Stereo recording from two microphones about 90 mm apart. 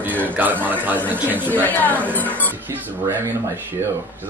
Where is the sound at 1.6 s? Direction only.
20° left (ahead or behind).